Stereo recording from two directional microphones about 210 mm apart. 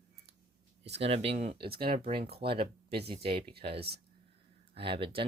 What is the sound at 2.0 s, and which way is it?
Speech, 30° right (ahead or behind).